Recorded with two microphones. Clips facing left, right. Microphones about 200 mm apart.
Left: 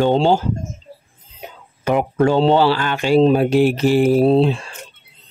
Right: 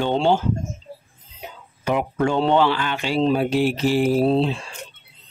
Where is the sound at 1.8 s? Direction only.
45° left (ahead or behind).